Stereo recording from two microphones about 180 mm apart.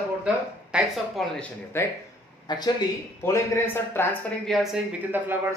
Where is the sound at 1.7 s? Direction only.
15° left (ahead or behind).